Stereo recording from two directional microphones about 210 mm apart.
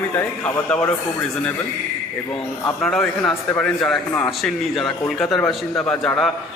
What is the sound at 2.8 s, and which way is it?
A man's voice, 5° left (ahead or behind).